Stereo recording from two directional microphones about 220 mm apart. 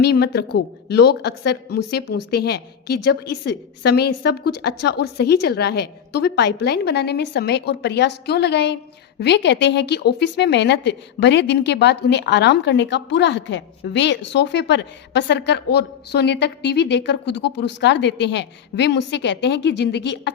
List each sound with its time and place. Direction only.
0.0 s a woman's voice: 50° left (ahead or behind)